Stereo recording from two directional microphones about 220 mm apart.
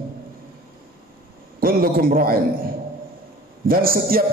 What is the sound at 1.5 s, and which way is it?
Speech, 40° right (ahead or behind).